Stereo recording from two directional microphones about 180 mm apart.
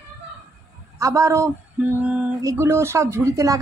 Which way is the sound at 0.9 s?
15° right (ahead or behind).